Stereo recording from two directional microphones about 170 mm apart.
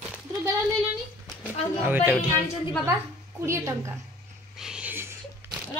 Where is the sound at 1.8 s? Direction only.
10° right (ahead or behind).